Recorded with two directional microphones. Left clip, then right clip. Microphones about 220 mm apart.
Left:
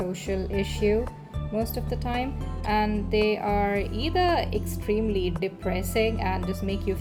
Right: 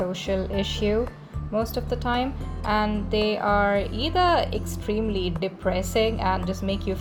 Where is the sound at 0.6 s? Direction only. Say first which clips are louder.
Left 3 dB; 45° right (ahead or behind).